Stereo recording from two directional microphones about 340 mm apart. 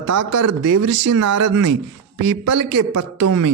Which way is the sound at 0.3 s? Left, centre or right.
Right.